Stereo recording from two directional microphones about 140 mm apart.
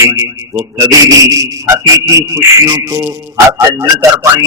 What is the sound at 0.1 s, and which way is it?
Speech, 25° right (ahead or behind).